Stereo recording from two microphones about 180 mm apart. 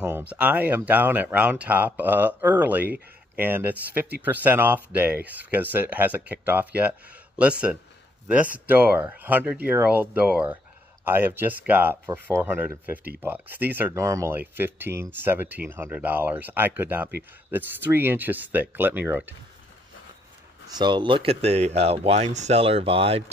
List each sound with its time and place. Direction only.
0.0 s speech: 5° right (ahead or behind)
20.6 s speech: 25° right (ahead or behind)